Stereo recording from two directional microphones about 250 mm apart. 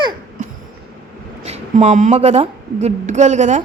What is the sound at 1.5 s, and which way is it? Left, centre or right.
A woman's voice, right.